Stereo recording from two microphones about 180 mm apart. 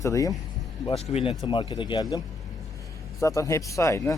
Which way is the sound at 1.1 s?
35° left (ahead or behind).